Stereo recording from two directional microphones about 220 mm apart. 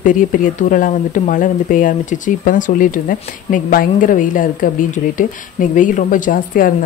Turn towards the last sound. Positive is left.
turn(degrees=40)  # may be behind; listen again after turning